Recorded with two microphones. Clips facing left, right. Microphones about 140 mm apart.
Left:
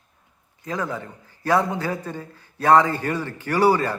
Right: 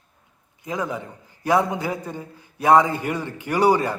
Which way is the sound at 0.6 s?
15° right (ahead or behind).